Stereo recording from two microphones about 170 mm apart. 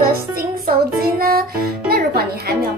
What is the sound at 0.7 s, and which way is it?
Speech, 60° right (ahead or behind).